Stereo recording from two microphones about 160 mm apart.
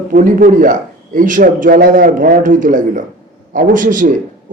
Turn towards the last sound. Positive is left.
turn(degrees=-55)  # may be behind; listen again after turning